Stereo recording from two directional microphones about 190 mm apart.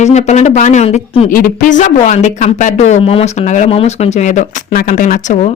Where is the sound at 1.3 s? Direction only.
45° left (ahead or behind).